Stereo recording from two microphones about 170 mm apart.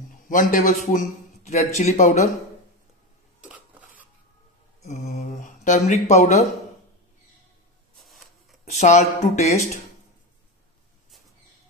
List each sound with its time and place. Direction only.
0.3 s a man's voice: 50° left (ahead or behind)
4.8 s speech: 40° left (ahead or behind)
8.0 s a sound: centre (ahead or behind)
8.6 s speech: 45° left (ahead or behind)